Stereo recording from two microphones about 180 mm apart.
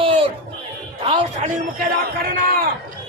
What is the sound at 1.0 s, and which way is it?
Speech, 35° right (ahead or behind).